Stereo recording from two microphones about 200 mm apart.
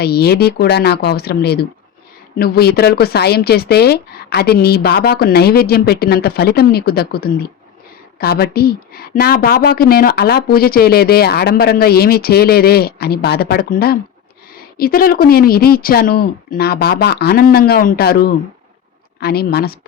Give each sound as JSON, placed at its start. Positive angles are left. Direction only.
{"t": 0.0, "sound": "a woman's voice", "side_deg": 50}